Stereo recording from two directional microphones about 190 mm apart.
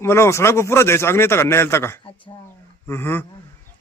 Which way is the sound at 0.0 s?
15° left (ahead or behind).